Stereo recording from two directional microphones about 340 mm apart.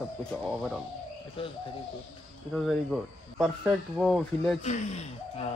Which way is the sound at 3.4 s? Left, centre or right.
Centre.